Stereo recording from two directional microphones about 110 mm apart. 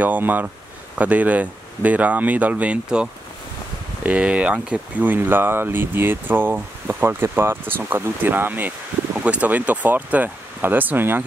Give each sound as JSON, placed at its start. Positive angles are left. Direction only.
{"t": 0.0, "sound": "speech", "side_deg": -15}